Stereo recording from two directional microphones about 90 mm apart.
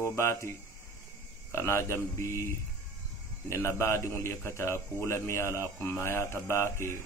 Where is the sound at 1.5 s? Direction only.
30° left (ahead or behind).